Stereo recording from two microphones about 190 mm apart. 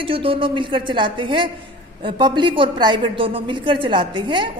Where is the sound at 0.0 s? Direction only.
30° right (ahead or behind).